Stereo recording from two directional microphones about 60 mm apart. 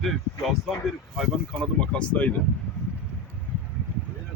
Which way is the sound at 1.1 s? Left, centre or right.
Centre.